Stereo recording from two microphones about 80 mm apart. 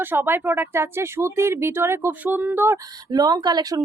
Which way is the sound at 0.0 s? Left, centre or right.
Right.